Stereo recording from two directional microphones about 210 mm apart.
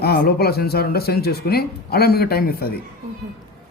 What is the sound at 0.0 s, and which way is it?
A man's voice, 50° left (ahead or behind).